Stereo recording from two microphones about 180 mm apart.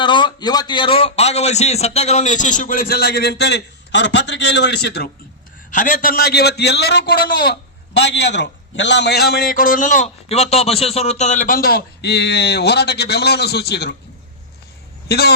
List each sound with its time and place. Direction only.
0.0 s a man's voice: 25° left (ahead or behind); by 5.1 s 65° left (ahead or behind)
5.7 s a man's voice: 45° left (ahead or behind); by 13.9 s 65° left (ahead or behind)
15.0 s a woman's voice: 60° left (ahead or behind)